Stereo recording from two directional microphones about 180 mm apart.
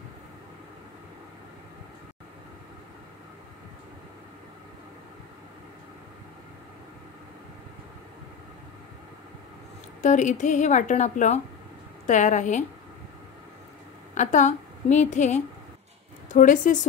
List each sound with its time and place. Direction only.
10.0 s a woman's voice: 40° left (ahead or behind)
14.1 s a woman's voice: 40° left (ahead or behind)